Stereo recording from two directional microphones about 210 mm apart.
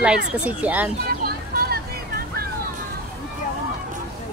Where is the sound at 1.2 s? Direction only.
45° right (ahead or behind).